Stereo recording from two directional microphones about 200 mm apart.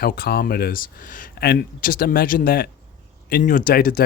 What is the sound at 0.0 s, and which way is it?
Speech, 50° left (ahead or behind).